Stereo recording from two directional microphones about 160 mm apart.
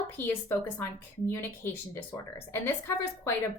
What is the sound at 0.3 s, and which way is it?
A woman's voice, 15° left (ahead or behind).